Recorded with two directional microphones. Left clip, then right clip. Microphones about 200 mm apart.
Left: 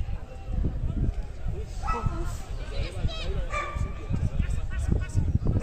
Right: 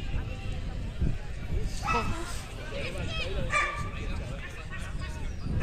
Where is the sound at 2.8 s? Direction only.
50° left (ahead or behind).